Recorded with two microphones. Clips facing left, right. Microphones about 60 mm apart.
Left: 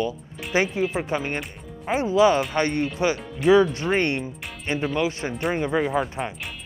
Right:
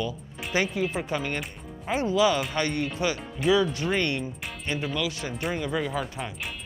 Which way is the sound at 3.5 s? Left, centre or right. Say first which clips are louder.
Left 6 dB; left.